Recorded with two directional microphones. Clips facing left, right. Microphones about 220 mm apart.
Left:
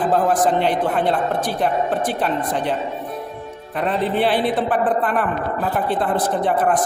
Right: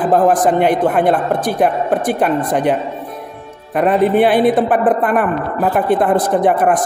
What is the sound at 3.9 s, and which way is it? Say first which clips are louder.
Speech: right 7 dB; 15° right (ahead or behind).